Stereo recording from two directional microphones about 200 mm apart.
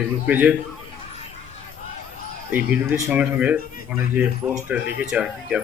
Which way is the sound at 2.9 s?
15° right (ahead or behind).